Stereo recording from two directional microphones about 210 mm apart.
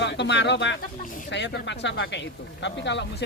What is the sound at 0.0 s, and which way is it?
Speech, 55° left (ahead or behind).